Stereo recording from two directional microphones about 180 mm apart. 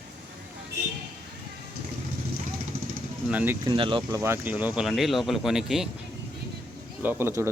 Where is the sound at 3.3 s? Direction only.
10° right (ahead or behind).